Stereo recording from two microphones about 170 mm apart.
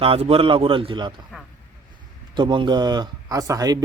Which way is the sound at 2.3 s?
30° right (ahead or behind).